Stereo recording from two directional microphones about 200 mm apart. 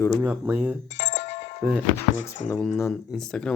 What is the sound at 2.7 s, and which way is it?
Speech, 10° left (ahead or behind).